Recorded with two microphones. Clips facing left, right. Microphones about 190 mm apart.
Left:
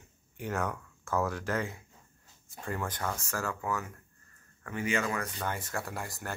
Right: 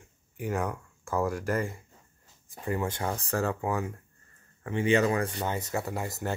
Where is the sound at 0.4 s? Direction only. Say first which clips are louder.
Right 3 dB; 10° right (ahead or behind); by 5.3 s 35° right (ahead or behind).